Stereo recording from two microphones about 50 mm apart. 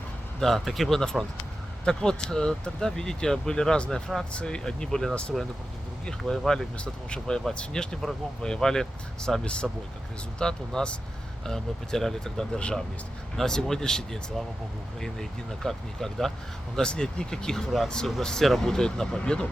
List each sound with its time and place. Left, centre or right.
0.3 s speech: centre
12.5 s speech: left